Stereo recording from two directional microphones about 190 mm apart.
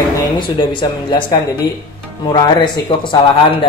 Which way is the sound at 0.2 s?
20° left (ahead or behind).